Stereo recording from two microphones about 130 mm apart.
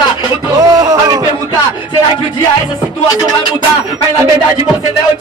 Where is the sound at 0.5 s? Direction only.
30° right (ahead or behind).